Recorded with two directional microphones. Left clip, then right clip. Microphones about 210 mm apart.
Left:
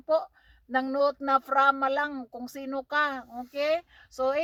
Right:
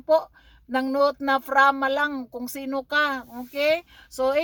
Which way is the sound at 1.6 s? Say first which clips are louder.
Right 7 dB; 15° right (ahead or behind).